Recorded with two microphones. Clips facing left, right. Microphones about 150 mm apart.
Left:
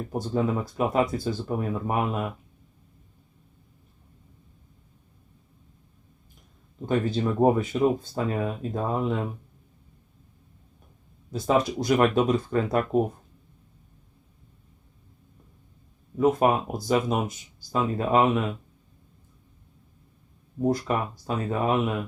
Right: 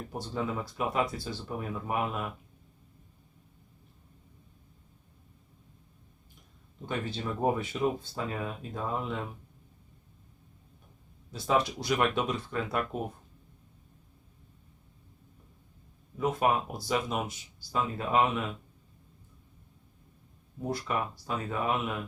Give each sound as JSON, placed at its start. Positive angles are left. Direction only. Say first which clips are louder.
{"t": 0.2, "sound": "speech", "louder": "left 7 dB", "side_deg": 45}
{"t": 6.8, "sound": "speech", "louder": "left 9 dB", "side_deg": 45}
{"t": 11.3, "sound": "speech", "louder": "left 5 dB", "side_deg": 45}
{"t": 16.1, "sound": "speech", "louder": "left 6 dB", "side_deg": 40}
{"t": 20.7, "sound": "speech", "louder": "left 7 dB", "side_deg": 40}